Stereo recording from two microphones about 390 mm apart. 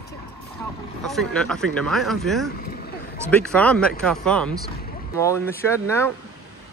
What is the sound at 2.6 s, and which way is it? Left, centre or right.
Vehicle, left.